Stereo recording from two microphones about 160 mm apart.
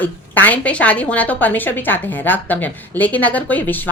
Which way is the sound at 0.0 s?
10° left (ahead or behind).